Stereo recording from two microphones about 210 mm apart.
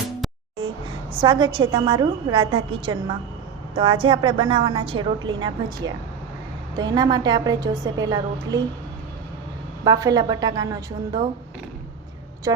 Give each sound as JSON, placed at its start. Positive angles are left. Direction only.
{"t": 1.2, "sound": "a woman's voice", "side_deg": -20}
{"t": 9.8, "sound": "a woman's voice", "side_deg": -20}
{"t": 12.5, "sound": "a woman's voice", "side_deg": -15}